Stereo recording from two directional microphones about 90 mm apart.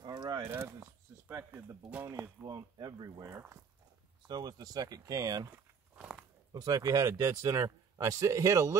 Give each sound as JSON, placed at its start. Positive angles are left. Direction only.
{"t": 0.0, "sound": "a sound", "side_deg": -50}
{"t": 0.4, "sound": "speech", "side_deg": -30}
{"t": 1.3, "sound": "speech", "side_deg": -20}
{"t": 2.4, "sound": "speech", "side_deg": -45}
{"t": 3.3, "sound": "speech", "side_deg": -30}
{"t": 4.3, "sound": "speech", "side_deg": -50}
{"t": 5.9, "sound": "biting", "side_deg": -15}
{"t": 6.5, "sound": "speech", "side_deg": -45}